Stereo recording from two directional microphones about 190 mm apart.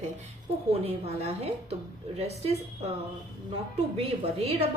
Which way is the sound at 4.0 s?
30° right (ahead or behind).